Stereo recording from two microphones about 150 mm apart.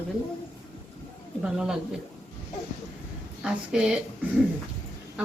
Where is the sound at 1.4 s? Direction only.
5° right (ahead or behind).